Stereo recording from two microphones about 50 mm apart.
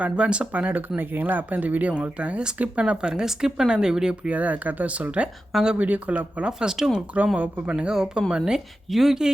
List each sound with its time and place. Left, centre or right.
0.0 s speech: right
0.5 s speech: right; by 4.2 s centre
4.3 s speech: right
6.4 s speech: centre
7.3 s speech: right
7.8 s speech: centre